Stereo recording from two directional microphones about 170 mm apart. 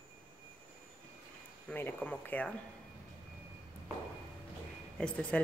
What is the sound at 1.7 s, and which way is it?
Speech, 10° left (ahead or behind).